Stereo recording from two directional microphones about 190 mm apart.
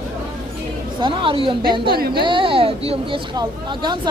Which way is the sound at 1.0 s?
25° right (ahead or behind).